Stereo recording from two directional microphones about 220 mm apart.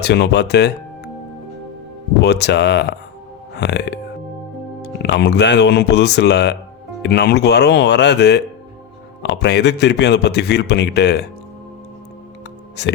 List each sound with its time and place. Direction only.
0.0 s a man's voice: 50° left (ahead or behind)
2.2 s a man's voice: 50° left (ahead or behind)